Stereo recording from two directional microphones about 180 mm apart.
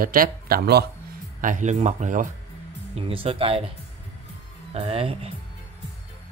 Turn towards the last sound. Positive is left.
turn(degrees=-35)  # may be behind; listen again after turning